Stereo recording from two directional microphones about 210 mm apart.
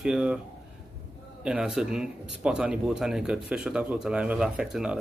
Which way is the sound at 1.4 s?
5° right (ahead or behind).